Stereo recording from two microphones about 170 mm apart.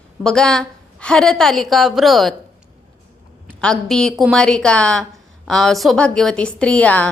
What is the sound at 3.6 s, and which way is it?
A woman's voice, 5° left (ahead or behind).